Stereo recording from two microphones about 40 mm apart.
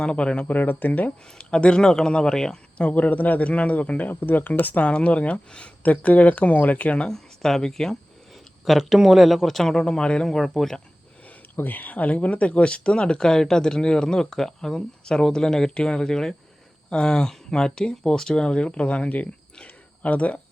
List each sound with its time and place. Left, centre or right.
0.0 s speech: left
0.4 s speech: left
1.4 s speech: left
2.9 s speech: left
4.1 s speech: left
4.8 s speech: left
7.1 s speech: centre
8.6 s speech: centre
9.8 s speech: left
10.2 s speech: centre
11.5 s speech: left
19.6 s a sound: left